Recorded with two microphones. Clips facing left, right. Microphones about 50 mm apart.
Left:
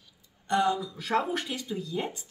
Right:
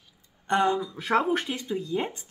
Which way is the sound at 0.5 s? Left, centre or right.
Right.